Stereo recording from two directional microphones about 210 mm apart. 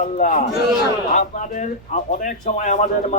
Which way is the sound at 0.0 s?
35° left (ahead or behind).